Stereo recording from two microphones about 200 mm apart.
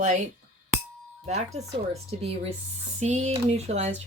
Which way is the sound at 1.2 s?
35° right (ahead or behind).